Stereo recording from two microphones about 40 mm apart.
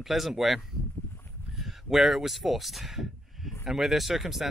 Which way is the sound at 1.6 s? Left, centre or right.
Centre.